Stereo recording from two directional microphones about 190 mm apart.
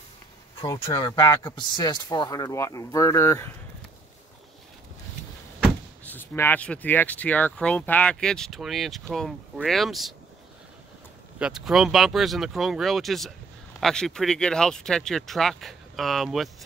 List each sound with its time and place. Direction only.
0.8 s speech: 15° left (ahead or behind)
6.0 s speech: 10° left (ahead or behind)
11.3 s speech: 5° right (ahead or behind)